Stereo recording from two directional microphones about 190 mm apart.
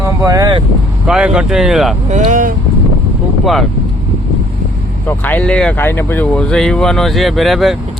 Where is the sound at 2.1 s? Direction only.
40° right (ahead or behind).